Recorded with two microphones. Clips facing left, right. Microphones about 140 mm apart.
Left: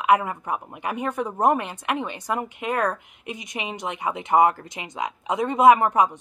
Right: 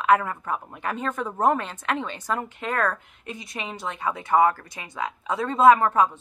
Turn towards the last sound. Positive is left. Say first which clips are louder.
# left 1 dB
turn(degrees=15)  # may be behind; listen again after turning